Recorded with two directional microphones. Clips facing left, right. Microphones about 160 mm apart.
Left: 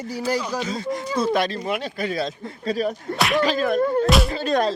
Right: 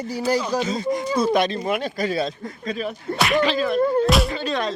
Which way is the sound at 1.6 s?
45° right (ahead or behind).